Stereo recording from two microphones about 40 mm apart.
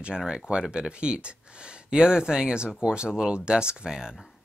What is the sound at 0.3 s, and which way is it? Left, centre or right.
Speech, right.